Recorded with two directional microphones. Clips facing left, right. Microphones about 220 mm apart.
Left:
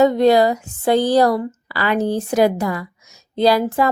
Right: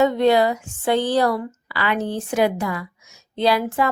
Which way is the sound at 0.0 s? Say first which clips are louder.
Left 3 dB; 40° left (ahead or behind).